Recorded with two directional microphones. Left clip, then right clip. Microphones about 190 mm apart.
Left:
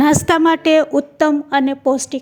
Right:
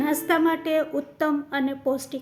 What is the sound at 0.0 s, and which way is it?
A woman's voice, 50° left (ahead or behind).